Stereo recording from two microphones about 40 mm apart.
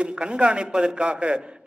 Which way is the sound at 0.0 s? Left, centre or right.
Right.